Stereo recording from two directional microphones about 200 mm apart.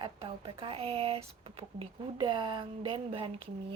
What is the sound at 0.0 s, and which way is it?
Speech, 25° right (ahead or behind).